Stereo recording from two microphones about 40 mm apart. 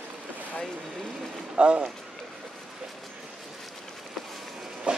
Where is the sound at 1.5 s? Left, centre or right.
Right.